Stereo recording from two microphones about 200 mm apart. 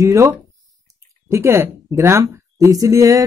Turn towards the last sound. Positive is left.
turn(degrees=-15)  # may be behind; listen again after turning